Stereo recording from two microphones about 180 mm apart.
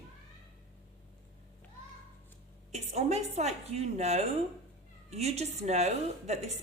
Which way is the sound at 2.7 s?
40° right (ahead or behind).